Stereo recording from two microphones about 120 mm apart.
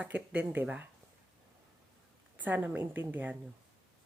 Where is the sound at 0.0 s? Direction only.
15° right (ahead or behind).